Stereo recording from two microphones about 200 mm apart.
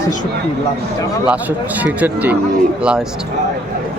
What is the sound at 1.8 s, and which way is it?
Wild animals, 5° right (ahead or behind).